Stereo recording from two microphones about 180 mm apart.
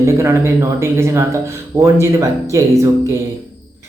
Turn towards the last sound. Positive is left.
turn(degrees=-15)  # may be behind; listen again after turning